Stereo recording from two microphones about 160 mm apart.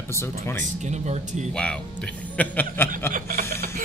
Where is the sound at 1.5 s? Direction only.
5° left (ahead or behind).